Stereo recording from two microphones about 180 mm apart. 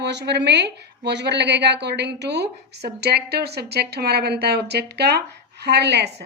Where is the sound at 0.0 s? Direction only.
70° right (ahead or behind).